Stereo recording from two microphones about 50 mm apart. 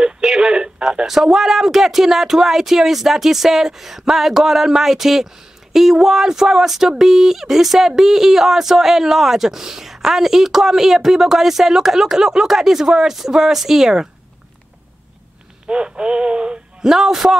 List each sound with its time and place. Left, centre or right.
0.0 s radio: centre
1.1 s speech: centre
15.6 s speech: right
16.9 s speech: centre